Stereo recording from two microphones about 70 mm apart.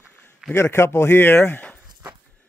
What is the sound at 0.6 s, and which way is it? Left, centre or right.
Speech, left.